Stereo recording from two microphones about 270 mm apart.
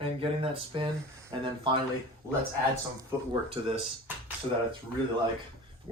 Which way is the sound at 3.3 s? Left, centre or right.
Centre.